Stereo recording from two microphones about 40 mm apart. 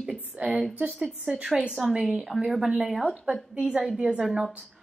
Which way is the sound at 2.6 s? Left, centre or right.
Centre.